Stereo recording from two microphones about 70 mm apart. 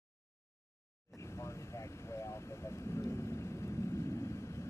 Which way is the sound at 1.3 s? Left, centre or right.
Left.